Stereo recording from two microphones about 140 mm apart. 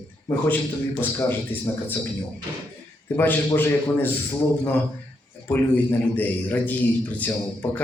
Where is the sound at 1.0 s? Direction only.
15° left (ahead or behind).